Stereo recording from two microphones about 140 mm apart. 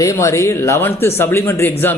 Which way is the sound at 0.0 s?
20° left (ahead or behind).